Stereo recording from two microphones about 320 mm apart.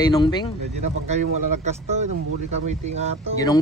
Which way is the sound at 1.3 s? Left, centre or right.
Right.